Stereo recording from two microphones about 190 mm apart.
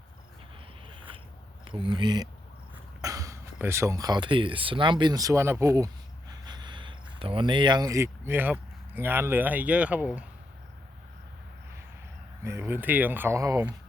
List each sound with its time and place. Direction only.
1.6 s speech: 25° right (ahead or behind); by 10.2 s 5° right (ahead or behind)
12.4 s speech: 15° right (ahead or behind)